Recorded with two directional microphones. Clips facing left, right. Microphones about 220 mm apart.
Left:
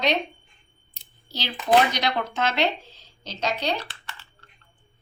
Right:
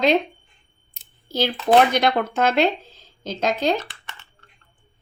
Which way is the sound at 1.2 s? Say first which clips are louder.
Right 5 dB; 50° right (ahead or behind).